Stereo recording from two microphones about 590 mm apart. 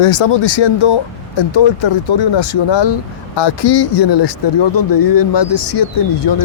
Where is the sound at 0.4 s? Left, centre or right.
Left.